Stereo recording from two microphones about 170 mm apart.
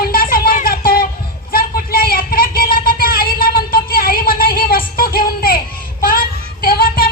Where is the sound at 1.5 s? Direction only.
60° left (ahead or behind).